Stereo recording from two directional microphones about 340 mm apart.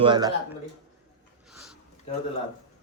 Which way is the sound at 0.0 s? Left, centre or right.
Centre.